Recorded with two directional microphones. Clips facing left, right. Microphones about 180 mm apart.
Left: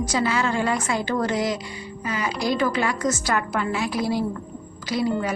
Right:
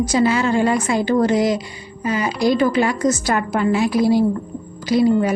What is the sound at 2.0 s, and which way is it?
A woman's voice, 30° right (ahead or behind).